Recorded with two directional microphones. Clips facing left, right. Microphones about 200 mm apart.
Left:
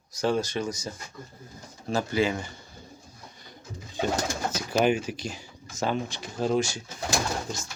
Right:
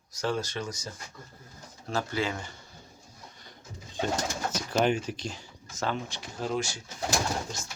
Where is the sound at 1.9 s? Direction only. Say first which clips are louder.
Left 5 dB; 15° left (ahead or behind).